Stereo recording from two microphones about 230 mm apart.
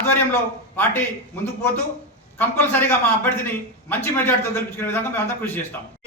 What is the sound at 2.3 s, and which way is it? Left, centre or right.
A man's voice, centre.